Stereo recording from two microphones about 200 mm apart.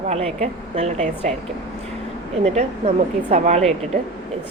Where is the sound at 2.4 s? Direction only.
35° right (ahead or behind).